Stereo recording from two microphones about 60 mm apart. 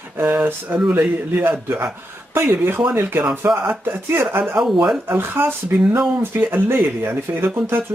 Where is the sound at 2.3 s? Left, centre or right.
Right.